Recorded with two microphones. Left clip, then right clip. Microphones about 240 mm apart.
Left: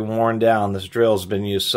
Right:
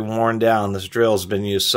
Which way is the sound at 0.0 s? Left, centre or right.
Centre.